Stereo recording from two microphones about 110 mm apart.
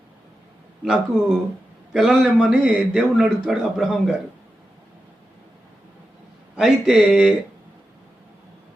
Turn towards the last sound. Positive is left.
turn(degrees=-5)  # may be behind; listen again after turning